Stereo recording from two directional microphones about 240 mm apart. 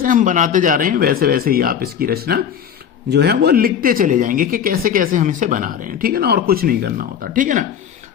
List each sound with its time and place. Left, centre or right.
0.0 s speech: right